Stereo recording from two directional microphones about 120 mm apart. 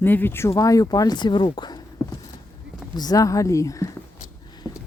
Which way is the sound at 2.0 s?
30° left (ahead or behind).